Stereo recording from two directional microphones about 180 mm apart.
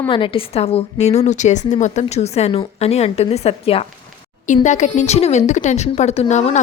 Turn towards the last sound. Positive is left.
turn(degrees=35)  # may be behind; listen again after turning